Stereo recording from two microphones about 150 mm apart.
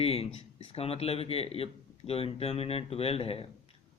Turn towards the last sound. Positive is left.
turn(degrees=40)  # may be behind; listen again after turning